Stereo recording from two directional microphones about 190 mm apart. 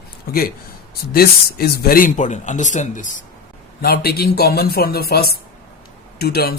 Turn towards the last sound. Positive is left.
turn(degrees=55)  # may be behind; listen again after turning